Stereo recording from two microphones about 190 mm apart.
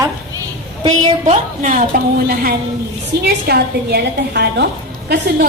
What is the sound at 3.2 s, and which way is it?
A woman's voice, 55° right (ahead or behind).